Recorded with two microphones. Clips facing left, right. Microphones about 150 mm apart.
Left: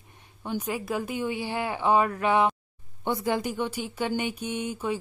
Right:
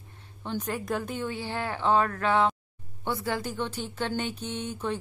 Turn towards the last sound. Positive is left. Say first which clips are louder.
# left 2 dB
turn(degrees=10)  # may be behind; listen again after turning